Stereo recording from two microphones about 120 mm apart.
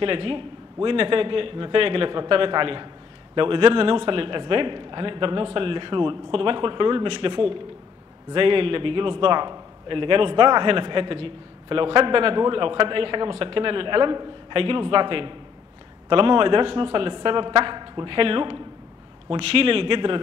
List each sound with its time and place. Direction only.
0.0 s a man's voice: 45° right (ahead or behind)